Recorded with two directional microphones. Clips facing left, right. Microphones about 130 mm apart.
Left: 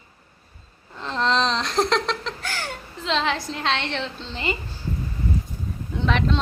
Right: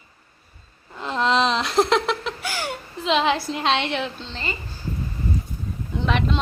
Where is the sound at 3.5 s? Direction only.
15° right (ahead or behind).